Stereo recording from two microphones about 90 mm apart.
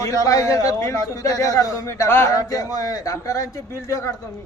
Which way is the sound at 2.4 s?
40° left (ahead or behind).